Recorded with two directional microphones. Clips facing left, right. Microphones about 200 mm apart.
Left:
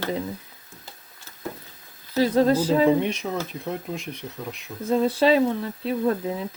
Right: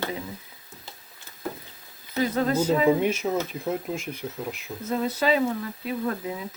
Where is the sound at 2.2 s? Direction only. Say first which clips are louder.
Left 4 dB; 35° left (ahead or behind).